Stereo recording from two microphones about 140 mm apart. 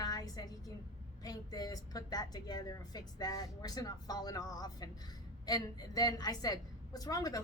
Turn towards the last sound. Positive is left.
turn(degrees=25)  # may be behind; listen again after turning